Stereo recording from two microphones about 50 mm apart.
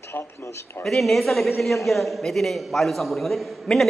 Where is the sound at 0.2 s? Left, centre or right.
Left.